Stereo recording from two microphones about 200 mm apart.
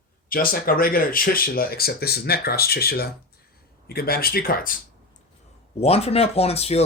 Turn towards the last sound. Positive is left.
turn(degrees=30)  # may be behind; listen again after turning